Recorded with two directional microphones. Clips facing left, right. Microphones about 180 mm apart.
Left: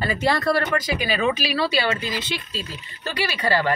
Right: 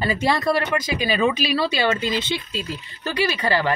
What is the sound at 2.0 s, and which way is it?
Speech, 25° right (ahead or behind).